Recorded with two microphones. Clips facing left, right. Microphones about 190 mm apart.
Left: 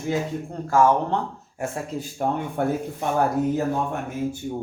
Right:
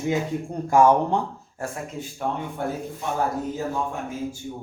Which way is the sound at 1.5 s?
20° left (ahead or behind).